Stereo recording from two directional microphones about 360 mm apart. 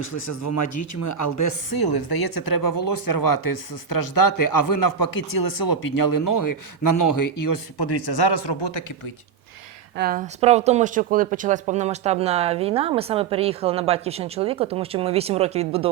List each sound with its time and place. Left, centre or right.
0.1 s speech: left
1.7 s speech: left
10.0 s speech: right